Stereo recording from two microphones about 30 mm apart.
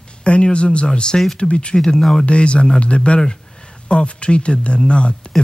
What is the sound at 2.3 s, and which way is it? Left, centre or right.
Speech, left.